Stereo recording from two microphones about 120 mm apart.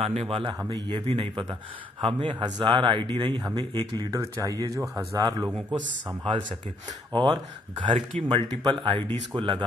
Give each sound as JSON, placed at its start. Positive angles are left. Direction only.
{"t": 0.0, "sound": "a man's voice", "side_deg": -55}
{"t": 4.7, "sound": "speech", "side_deg": -20}
{"t": 5.2, "sound": "a man's voice", "side_deg": -30}